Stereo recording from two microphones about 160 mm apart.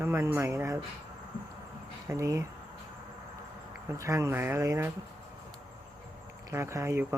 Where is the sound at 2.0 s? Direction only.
20° right (ahead or behind).